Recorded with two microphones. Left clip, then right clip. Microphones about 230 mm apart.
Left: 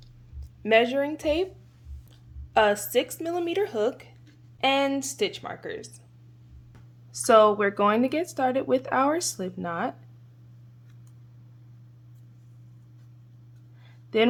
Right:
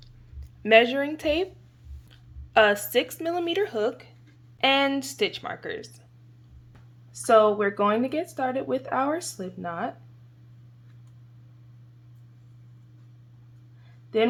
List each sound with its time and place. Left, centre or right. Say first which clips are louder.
0.6 s speech: right 3 dB; centre
4.6 s speech: right 2 dB; centre
7.1 s speech: left 1 dB; centre